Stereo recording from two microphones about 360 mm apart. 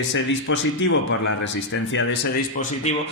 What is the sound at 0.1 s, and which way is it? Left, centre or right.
Speech, left.